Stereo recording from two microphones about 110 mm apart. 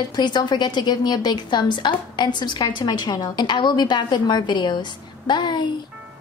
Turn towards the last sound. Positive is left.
turn(degrees=45)  # may be behind; listen again after turning